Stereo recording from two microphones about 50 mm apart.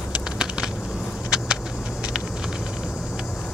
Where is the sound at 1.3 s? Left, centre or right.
Centre.